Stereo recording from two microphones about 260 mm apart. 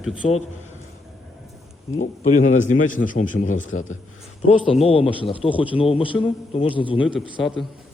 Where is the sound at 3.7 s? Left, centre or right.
Left.